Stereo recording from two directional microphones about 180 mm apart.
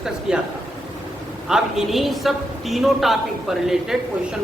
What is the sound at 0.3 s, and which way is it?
Speech, 5° right (ahead or behind).